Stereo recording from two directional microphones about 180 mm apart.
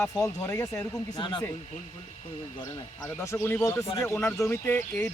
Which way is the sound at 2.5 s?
20° left (ahead or behind).